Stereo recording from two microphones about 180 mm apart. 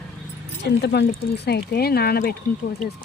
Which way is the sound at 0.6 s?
70° left (ahead or behind).